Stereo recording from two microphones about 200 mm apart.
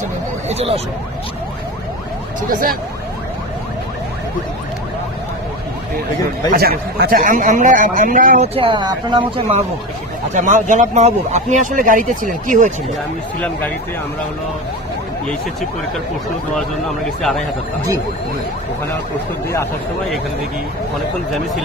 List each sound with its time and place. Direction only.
0.5 s speech: 30° right (ahead or behind)
2.5 s speech: 45° right (ahead or behind)
6.5 s speech: 50° right (ahead or behind)
8.5 s speech: 25° right (ahead or behind)
10.3 s speech: 40° right (ahead or behind)